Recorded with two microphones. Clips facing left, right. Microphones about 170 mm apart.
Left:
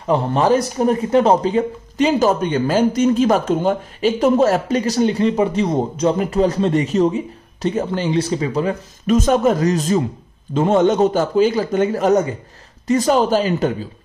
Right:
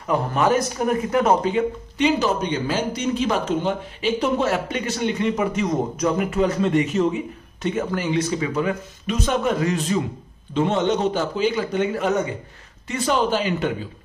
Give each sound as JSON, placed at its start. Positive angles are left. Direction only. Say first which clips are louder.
{"t": 0.0, "sound": "speech", "louder": "left 4 dB", "side_deg": 30}
{"t": 9.1, "sound": "a man's voice", "louder": "left 7 dB", "side_deg": 45}